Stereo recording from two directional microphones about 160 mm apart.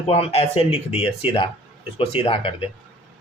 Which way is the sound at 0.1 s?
40° left (ahead or behind).